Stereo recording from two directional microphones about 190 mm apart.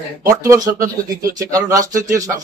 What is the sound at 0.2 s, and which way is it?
A man's voice, 15° right (ahead or behind).